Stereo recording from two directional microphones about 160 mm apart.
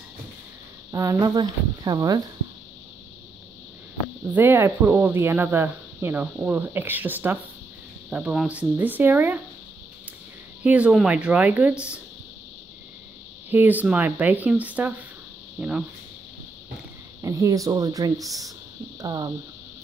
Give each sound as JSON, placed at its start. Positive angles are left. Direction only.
{"t": 0.9, "sound": "speech", "side_deg": -20}
{"t": 4.3, "sound": "speech", "side_deg": -15}
{"t": 10.6, "sound": "speech", "side_deg": -10}
{"t": 13.5, "sound": "speech", "side_deg": -10}
{"t": 17.2, "sound": "speech", "side_deg": -20}